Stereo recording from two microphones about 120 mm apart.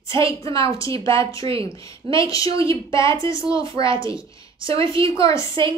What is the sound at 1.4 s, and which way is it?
Speech, 35° left (ahead or behind).